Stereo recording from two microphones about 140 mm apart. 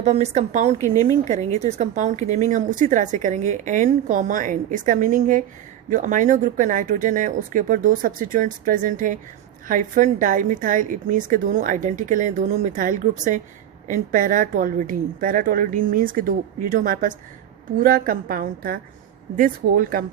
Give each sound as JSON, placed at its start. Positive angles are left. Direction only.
{"t": 0.0, "sound": "a woman's voice", "side_deg": -55}
{"t": 16.7, "sound": "a woman's voice", "side_deg": -75}